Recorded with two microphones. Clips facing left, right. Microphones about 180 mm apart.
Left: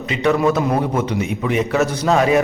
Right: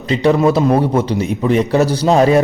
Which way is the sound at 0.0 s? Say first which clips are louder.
Right 4 dB; 35° right (ahead or behind).